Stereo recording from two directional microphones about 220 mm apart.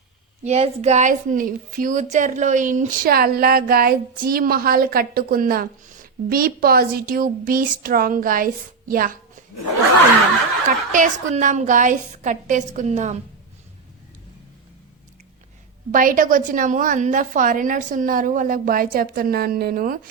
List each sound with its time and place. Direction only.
0.4 s a woman's voice: 30° right (ahead or behind)
10.9 s a woman's voice: 35° right (ahead or behind)
15.9 s a woman's voice: 40° right (ahead or behind)